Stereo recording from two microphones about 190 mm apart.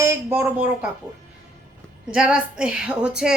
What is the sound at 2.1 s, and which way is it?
A woman's voice, 5° right (ahead or behind).